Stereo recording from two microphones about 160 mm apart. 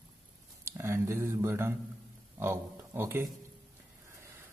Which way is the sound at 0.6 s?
15° right (ahead or behind).